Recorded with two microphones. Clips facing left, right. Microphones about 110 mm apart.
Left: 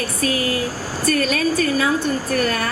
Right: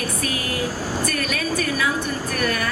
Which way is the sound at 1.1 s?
30° left (ahead or behind).